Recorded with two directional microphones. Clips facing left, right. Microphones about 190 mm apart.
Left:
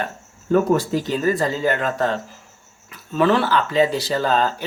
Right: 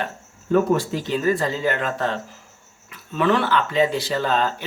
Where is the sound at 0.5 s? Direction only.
40° left (ahead or behind).